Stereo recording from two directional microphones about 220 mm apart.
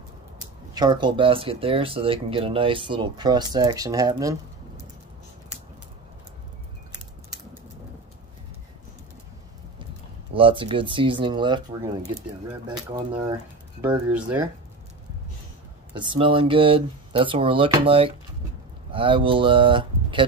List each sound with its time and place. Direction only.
0.7 s speech: 20° right (ahead or behind)
10.3 s speech: 25° right (ahead or behind)
13.2 s speech: 20° right (ahead or behind)
15.9 s speech: 20° right (ahead or behind)